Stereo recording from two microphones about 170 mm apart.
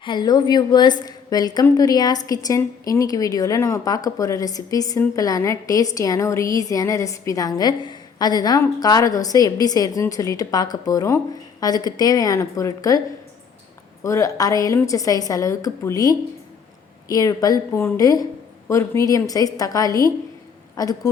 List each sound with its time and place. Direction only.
0.0 s a woman's voice: 25° left (ahead or behind)
14.0 s a woman's voice: 20° left (ahead or behind)